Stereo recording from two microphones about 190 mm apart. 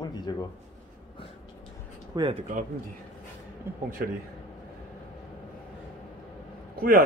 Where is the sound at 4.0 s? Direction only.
50° right (ahead or behind).